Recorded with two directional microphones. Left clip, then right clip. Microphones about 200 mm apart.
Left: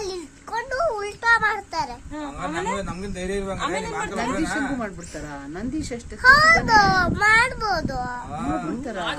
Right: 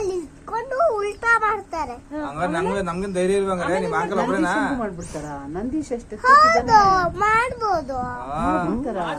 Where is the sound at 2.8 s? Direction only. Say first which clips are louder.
Right 7 dB; 45° right (ahead or behind).